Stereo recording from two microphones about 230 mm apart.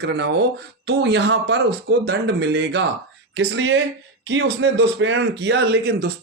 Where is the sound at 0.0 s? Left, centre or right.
Right.